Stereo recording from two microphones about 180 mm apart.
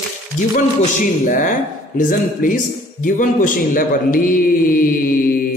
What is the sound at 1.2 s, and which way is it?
A man's voice, 45° left (ahead or behind).